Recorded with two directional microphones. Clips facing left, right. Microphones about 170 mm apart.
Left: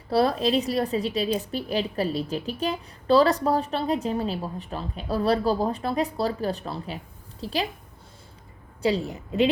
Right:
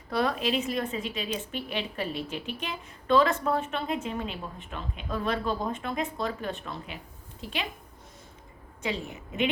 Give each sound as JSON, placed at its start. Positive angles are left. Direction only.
{"t": 0.1, "sound": "a woman's voice", "side_deg": 35}
{"t": 8.8, "sound": "a woman's voice", "side_deg": 35}